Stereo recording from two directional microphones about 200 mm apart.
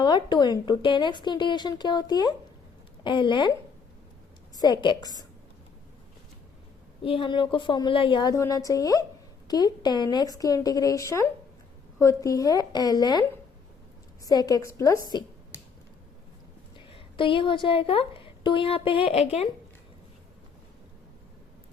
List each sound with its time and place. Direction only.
0.0 s a woman's voice: 20° left (ahead or behind)
7.0 s a woman's voice: 25° left (ahead or behind)
14.3 s a woman's voice: 20° left (ahead or behind)
15.0 s a sound: 20° left (ahead or behind)
16.7 s a woman's voice: 25° left (ahead or behind)